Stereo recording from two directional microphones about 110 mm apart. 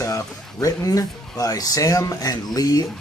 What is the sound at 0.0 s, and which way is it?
Speech, 30° left (ahead or behind).